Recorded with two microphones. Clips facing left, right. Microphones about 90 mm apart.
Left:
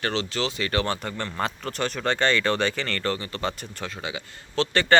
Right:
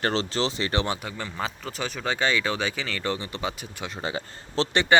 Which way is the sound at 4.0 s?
35° right (ahead or behind).